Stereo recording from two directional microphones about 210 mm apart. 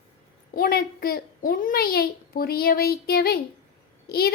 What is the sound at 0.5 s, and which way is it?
A woman's voice, 45° left (ahead or behind).